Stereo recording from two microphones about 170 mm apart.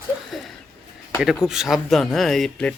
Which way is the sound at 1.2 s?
5° right (ahead or behind).